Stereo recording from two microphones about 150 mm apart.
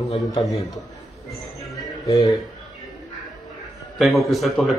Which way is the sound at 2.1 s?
25° left (ahead or behind).